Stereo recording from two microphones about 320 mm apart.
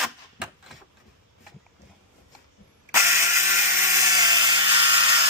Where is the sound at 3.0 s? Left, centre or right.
Centre.